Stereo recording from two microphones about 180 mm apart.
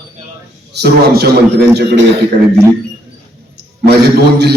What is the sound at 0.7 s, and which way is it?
Speech, 65° right (ahead or behind).